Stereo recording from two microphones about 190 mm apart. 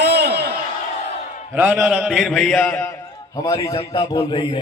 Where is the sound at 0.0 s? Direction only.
60° right (ahead or behind).